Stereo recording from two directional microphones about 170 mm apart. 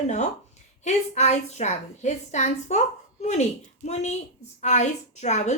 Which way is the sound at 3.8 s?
40° left (ahead or behind).